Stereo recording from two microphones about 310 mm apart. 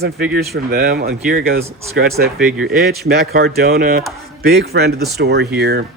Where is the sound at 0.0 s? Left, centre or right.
Right.